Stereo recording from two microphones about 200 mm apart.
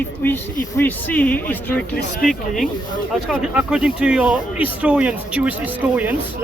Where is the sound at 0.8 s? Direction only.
10° left (ahead or behind).